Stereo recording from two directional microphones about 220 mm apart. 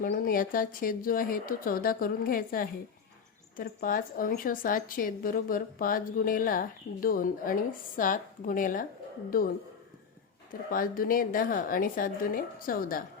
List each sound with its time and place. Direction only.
0.0 s a woman's voice: 40° left (ahead or behind)
10.5 s a woman's voice: 40° left (ahead or behind)